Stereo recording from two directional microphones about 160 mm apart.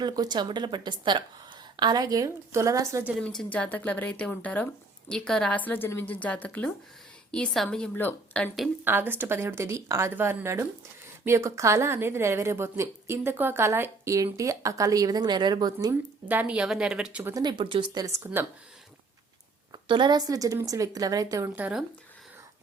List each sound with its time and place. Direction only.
0.0 s a woman's voice: 25° right (ahead or behind)
3.2 s a woman's voice: 5° left (ahead or behind)
8.8 s a woman's voice: 15° right (ahead or behind)
16.3 s a woman's voice: 10° right (ahead or behind)
17.3 s a woman's voice: 30° right (ahead or behind)
19.7 s a woman's voice: 30° right (ahead or behind)
21.5 s a woman's voice: 5° right (ahead or behind)